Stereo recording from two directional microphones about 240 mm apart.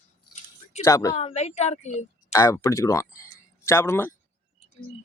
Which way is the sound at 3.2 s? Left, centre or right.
Centre.